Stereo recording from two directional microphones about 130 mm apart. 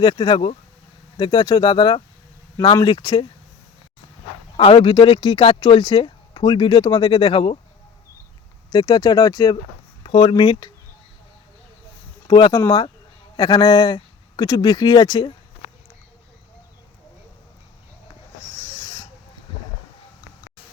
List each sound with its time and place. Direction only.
0.0 s speech: 35° left (ahead or behind)
4.5 s speech: 45° left (ahead or behind)
8.7 s speech: 30° left (ahead or behind)
10.0 s speech: 40° left (ahead or behind)
12.3 s speech: 30° left (ahead or behind)
15.6 s a sound: 90° left
18.7 s owl: 25° left (ahead or behind)